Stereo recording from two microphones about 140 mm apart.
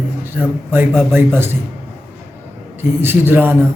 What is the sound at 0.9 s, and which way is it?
Speech, centre (ahead or behind).